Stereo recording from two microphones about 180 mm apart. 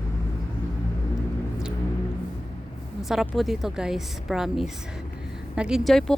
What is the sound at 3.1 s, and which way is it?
Speech, centre (ahead or behind).